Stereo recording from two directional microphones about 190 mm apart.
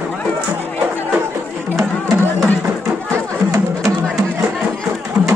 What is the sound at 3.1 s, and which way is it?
Music, 15° right (ahead or behind).